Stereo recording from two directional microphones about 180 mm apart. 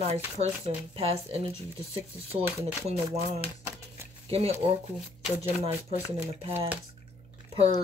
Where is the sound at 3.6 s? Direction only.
15° right (ahead or behind).